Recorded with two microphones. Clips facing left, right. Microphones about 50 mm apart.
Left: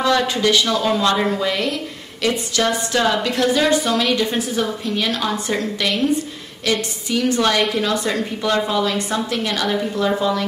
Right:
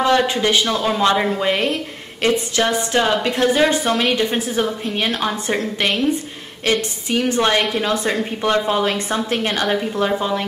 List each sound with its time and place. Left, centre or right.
0.0 s a woman's voice: right